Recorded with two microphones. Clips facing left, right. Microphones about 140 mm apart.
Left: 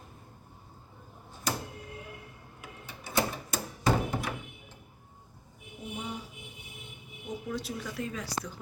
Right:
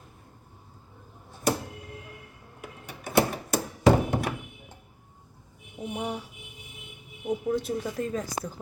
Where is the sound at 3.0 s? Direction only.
60° right (ahead or behind).